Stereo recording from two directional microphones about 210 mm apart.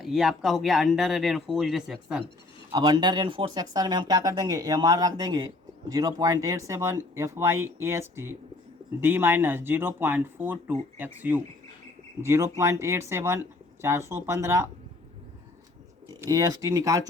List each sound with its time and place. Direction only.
0.0 s speech: centre (ahead or behind)
2.7 s speech: 20° right (ahead or behind)
16.2 s speech: 15° right (ahead or behind)